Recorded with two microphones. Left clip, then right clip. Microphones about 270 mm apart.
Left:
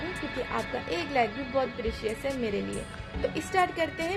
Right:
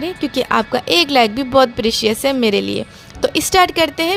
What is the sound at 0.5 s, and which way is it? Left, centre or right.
A woman's voice, right.